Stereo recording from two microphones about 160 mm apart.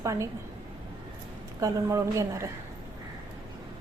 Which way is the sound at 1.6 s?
20° right (ahead or behind).